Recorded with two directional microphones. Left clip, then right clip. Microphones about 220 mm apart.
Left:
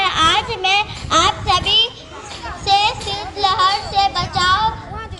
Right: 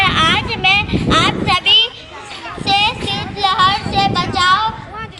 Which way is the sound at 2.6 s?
25° right (ahead or behind).